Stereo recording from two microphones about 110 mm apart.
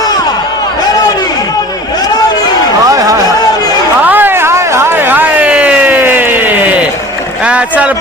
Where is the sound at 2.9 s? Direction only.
30° right (ahead or behind).